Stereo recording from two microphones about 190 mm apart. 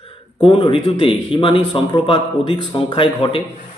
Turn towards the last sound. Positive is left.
turn(degrees=30)  # may be behind; listen again after turning